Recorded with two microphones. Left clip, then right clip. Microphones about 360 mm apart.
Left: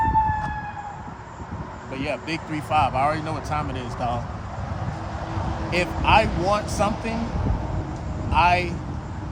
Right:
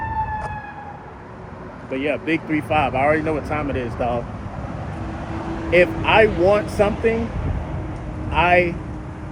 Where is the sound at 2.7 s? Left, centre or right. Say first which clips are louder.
Right 1 dB; left.